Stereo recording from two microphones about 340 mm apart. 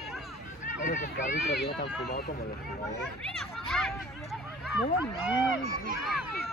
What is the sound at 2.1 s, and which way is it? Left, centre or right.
Speech, left.